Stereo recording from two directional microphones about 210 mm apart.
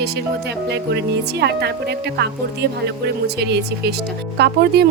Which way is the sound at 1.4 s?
50° right (ahead or behind).